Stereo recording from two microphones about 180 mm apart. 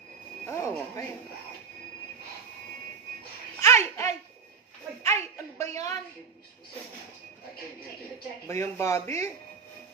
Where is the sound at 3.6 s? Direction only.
15° left (ahead or behind).